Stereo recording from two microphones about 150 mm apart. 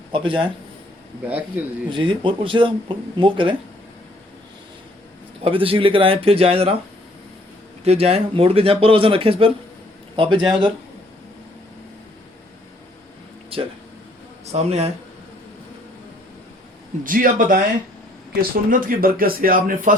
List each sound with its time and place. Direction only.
0.1 s speech: 35° right (ahead or behind)
1.3 s speech: 10° right (ahead or behind)
1.9 s speech: 35° right (ahead or behind)
5.4 s speech: 40° right (ahead or behind)
7.9 s speech: 45° right (ahead or behind)
13.5 s speech: 40° right (ahead or behind)
17.0 s speech: 65° right (ahead or behind)